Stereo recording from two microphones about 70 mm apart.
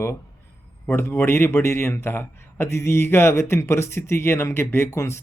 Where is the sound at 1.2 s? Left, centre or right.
Left.